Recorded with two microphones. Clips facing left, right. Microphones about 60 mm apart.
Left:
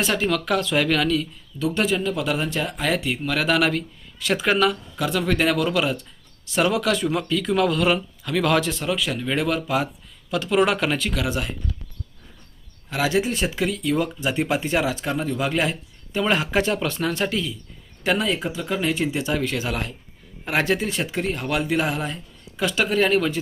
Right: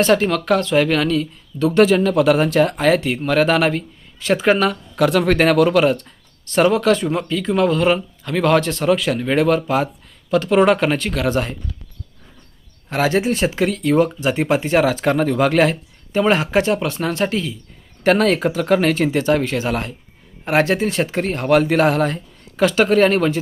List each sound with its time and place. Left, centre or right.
0.0 s speech: right
0.7 s speech: right
1.5 s speech: right
3.2 s speech: right
5.0 s speech: right
6.7 s speech: right
8.8 s speech: right
10.9 s speech: right
12.9 s speech: right
14.3 s speech: right
14.8 s speech: right
15.7 s speech: right
18.0 s speech: right